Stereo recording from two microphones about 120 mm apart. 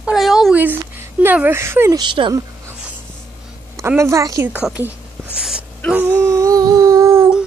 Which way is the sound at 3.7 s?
25° right (ahead or behind).